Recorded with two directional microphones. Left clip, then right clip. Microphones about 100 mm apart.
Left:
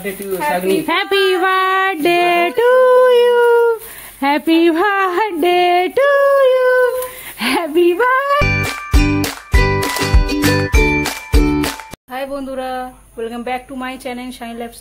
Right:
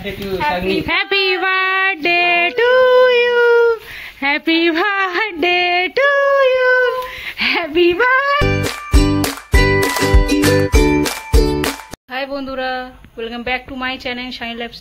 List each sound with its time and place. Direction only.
0.8 s a sound: 40° left (ahead or behind)
8.4 s music: 10° right (ahead or behind)
10.4 s music: centre (ahead or behind)
12.1 s a woman's voice: 20° left (ahead or behind)